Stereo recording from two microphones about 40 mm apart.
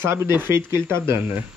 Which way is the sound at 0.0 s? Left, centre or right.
Right.